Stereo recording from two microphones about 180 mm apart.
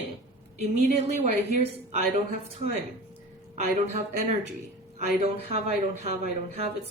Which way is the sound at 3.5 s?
40° right (ahead or behind).